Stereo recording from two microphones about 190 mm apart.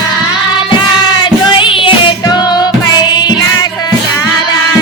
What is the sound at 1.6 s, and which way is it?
Music, 25° left (ahead or behind).